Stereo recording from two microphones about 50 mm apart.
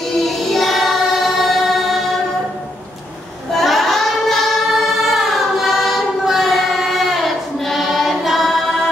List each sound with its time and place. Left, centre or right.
0.2 s choir: centre
3.5 s singing: centre
5.0 s choir: centre